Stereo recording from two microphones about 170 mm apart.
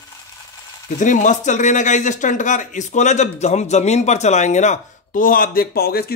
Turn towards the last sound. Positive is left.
turn(degrees=65)  # may be behind; listen again after turning